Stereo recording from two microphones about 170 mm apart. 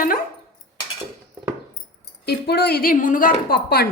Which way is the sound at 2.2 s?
70° left (ahead or behind).